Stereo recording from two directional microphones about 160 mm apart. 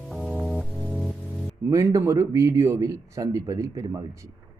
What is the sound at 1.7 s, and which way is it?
A man's voice, 20° right (ahead or behind).